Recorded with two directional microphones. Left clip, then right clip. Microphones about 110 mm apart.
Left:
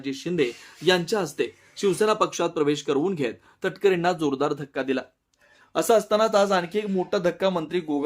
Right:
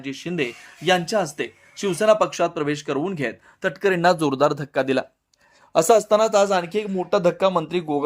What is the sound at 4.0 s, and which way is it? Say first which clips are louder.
Speech: right 6 dB; 60° right (ahead or behind).